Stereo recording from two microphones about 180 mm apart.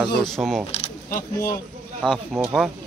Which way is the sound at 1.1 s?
55° left (ahead or behind).